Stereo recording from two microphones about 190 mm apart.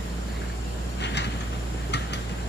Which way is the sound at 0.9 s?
65° left (ahead or behind).